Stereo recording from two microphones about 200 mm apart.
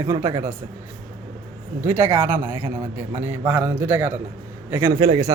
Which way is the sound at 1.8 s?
10° right (ahead or behind).